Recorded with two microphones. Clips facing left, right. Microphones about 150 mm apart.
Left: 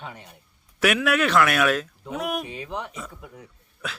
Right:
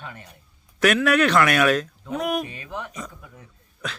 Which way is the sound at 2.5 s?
20° left (ahead or behind).